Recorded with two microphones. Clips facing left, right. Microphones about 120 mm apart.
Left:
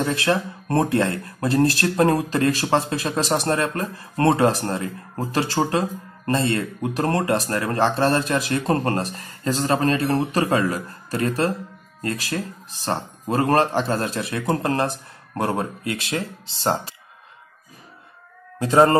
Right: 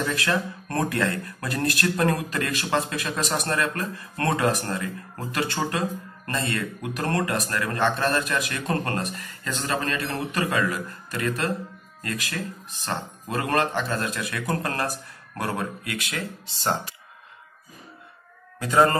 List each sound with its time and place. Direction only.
0.0 s speech: 30° left (ahead or behind)
18.6 s speech: 25° left (ahead or behind)